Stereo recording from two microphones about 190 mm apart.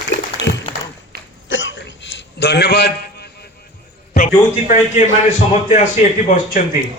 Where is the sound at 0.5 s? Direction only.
80° left; by 2.9 s 60° left (ahead or behind).